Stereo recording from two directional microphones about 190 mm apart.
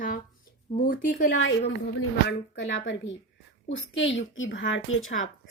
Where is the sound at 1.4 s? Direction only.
80° left.